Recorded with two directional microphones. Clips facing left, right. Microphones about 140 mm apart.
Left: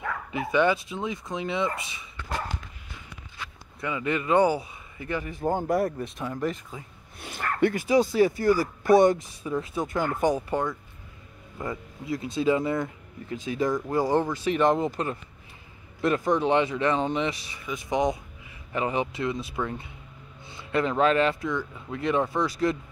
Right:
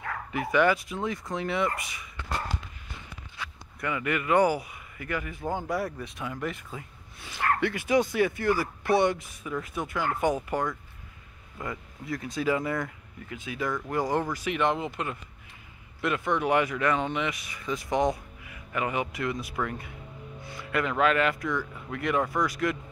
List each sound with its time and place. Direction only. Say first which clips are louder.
0.3 s speech: even; 20° left (ahead or behind)
3.8 s speech: left 1 dB; 20° left (ahead or behind)
5.7 s speech: left 6 dB; 50° left (ahead or behind)
6.2 s speech: left 2 dB; 30° left (ahead or behind)
7.2 s speech: left 2 dB; 50° left (ahead or behind)
9.4 s speech: left 4 dB; 30° left (ahead or behind)
9.9 s speech: left 2 dB; 40° left (ahead or behind)
17.7 s speech: left 1 dB; 20° left (ahead or behind)